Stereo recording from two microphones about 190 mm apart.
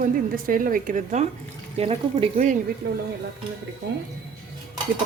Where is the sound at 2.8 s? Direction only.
65° right (ahead or behind).